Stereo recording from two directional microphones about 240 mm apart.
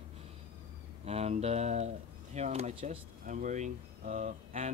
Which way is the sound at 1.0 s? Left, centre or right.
Right.